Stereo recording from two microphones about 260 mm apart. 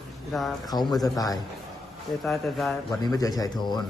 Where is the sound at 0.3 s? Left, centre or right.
Centre.